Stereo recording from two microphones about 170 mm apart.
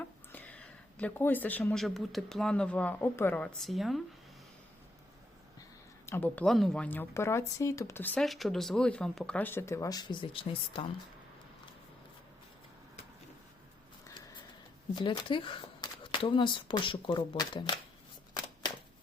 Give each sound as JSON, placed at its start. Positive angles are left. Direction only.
{"t": 0.3, "sound": "speech", "side_deg": 10}
{"t": 6.1, "sound": "speech", "side_deg": 10}
{"t": 14.9, "sound": "speech", "side_deg": 30}